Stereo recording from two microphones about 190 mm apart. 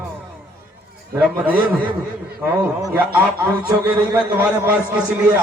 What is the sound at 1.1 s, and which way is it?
Speech, 10° right (ahead or behind).